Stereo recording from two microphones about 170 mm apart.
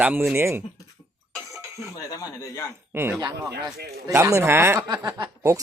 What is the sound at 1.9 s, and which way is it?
Speech, 20° left (ahead or behind).